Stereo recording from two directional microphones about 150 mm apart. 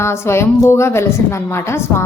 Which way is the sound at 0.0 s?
15° left (ahead or behind).